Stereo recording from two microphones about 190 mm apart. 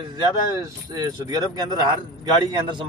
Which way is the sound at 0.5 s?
20° right (ahead or behind).